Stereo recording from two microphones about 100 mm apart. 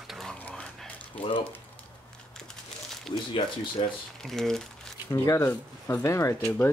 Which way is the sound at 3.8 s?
70° left (ahead or behind).